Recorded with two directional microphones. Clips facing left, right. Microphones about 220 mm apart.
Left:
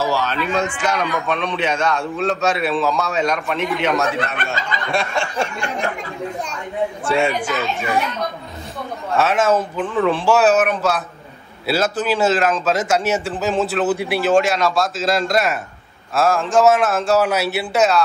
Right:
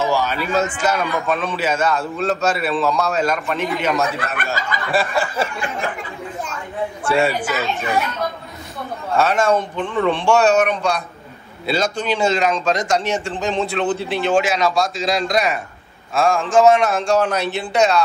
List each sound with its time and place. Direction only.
0.1 s a man's voice: 10° right (ahead or behind)
7.1 s a man's voice: centre (ahead or behind)
9.1 s a man's voice: centre (ahead or behind)
14.3 s a man's voice: centre (ahead or behind)